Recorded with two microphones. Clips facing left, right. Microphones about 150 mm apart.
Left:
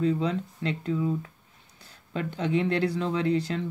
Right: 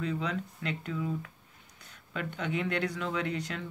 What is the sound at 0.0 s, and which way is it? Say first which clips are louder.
Speech: left 7 dB; 30° left (ahead or behind).